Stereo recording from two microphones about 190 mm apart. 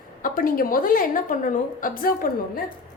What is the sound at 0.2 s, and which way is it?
A woman's voice, 45° left (ahead or behind).